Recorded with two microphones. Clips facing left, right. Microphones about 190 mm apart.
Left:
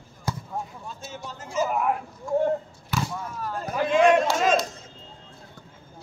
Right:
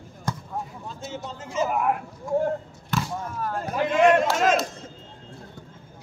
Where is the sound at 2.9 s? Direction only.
5° left (ahead or behind).